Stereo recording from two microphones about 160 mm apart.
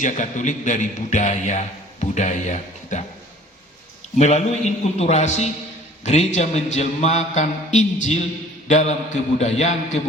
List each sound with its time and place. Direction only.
0.0 s a man's voice: 50° left (ahead or behind)
4.2 s a man's voice: 45° left (ahead or behind)